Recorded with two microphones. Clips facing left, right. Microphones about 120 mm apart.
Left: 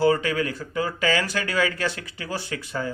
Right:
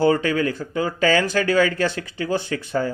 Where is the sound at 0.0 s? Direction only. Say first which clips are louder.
Right 3 dB; 30° right (ahead or behind).